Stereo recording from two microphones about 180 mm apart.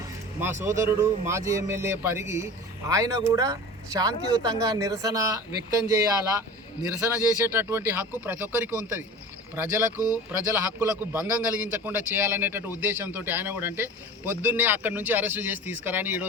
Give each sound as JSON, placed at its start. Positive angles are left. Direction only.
{"t": 0.6, "sound": "a man's voice", "side_deg": -15}
{"t": 7.4, "sound": "a man's voice", "side_deg": -10}